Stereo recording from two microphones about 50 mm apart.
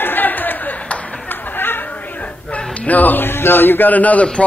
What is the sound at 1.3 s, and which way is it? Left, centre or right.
Chatter, left.